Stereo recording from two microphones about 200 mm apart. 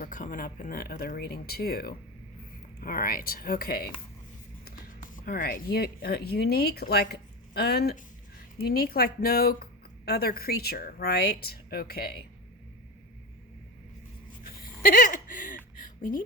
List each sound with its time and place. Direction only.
0.0 s speech: 40° left (ahead or behind)
5.1 s speech: 45° left (ahead or behind)
14.8 s a sound: 45° left (ahead or behind)